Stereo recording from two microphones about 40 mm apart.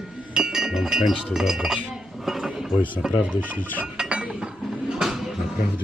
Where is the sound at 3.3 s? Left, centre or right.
Right.